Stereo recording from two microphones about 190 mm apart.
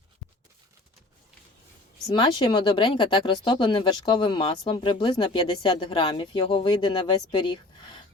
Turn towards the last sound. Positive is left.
turn(degrees=25)  # may be behind; listen again after turning